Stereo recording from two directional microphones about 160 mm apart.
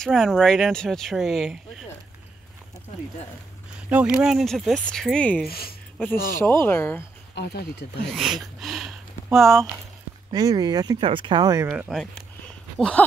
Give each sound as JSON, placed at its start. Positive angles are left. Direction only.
{"t": 0.0, "sound": "speech", "side_deg": 0}
{"t": 3.9, "sound": "speech", "side_deg": -5}
{"t": 5.5, "sound": "speech", "side_deg": 70}
{"t": 6.4, "sound": "speech", "side_deg": 15}
{"t": 7.3, "sound": "speech", "side_deg": 90}
{"t": 8.0, "sound": "speech", "side_deg": 0}
{"t": 10.3, "sound": "speech", "side_deg": -25}
{"t": 11.9, "sound": "speech", "side_deg": 5}
{"t": 12.7, "sound": "a sound", "side_deg": 5}